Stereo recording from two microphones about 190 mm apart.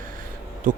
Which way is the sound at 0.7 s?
45° right (ahead or behind).